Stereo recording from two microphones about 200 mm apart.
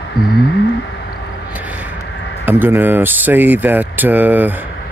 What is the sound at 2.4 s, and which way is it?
Speech, 10° right (ahead or behind).